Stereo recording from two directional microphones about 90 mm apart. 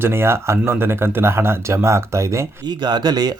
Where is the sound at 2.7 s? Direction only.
50° right (ahead or behind).